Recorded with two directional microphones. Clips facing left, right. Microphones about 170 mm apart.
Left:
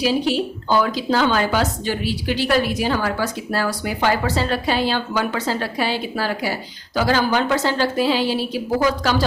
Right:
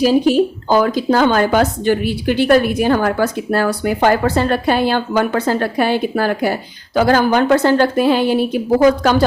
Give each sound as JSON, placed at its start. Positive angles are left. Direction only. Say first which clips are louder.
{"t": 0.0, "sound": "a woman's voice", "louder": "right 7 dB", "side_deg": -45}